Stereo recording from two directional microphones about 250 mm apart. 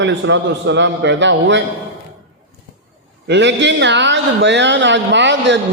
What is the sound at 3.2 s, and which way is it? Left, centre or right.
A man's voice, right.